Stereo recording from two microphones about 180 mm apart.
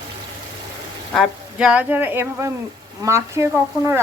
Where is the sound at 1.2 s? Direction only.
5° right (ahead or behind).